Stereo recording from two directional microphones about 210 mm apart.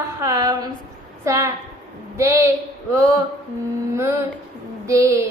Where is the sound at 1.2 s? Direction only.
15° right (ahead or behind).